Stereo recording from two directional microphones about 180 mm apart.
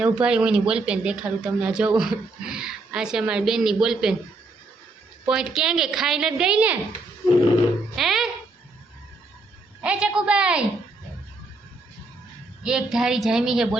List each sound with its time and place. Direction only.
0.0 s speech: 5° right (ahead or behind)
5.2 s speech: 5° right (ahead or behind)
7.9 s a sound: centre (ahead or behind)
9.8 s a woman's voice: 5° right (ahead or behind)
12.6 s speech: 5° right (ahead or behind)